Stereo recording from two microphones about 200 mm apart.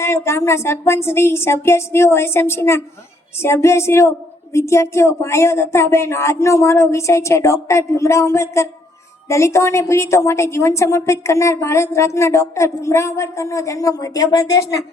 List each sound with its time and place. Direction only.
0.0 s a woman's voice: 15° left (ahead or behind)